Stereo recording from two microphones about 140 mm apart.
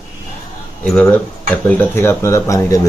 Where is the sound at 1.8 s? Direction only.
15° left (ahead or behind).